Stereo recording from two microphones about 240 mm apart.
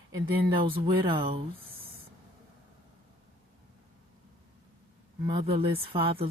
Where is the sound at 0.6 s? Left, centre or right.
Right.